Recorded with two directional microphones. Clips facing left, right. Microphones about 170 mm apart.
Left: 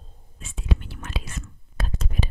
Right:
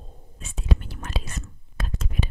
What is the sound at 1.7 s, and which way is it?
Whispering, 35° left (ahead or behind).